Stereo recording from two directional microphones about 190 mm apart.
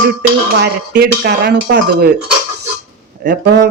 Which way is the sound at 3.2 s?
60° right (ahead or behind).